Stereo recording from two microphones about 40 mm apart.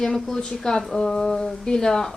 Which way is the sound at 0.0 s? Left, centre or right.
Centre.